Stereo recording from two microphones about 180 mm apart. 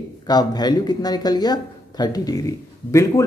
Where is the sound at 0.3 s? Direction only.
20° left (ahead or behind).